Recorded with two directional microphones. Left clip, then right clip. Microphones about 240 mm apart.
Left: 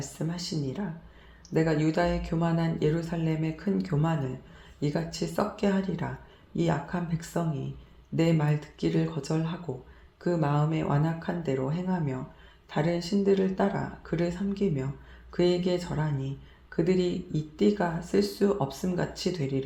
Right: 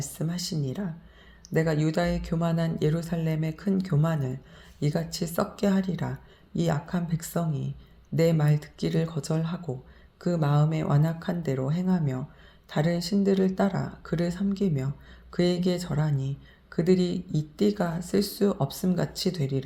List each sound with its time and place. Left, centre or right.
0.2 s speech: right